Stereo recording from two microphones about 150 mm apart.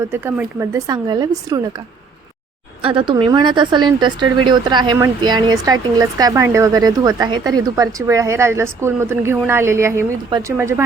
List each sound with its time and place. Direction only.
0.1 s speech: 15° right (ahead or behind)
2.8 s speech: 35° right (ahead or behind); by 10.1 s 20° right (ahead or behind)
10.2 s speech: 30° right (ahead or behind)
10.6 s speech: 15° right (ahead or behind)